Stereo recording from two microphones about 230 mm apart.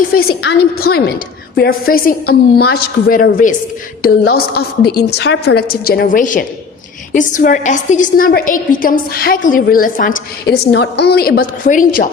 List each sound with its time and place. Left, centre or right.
0.1 s a woman's voice: left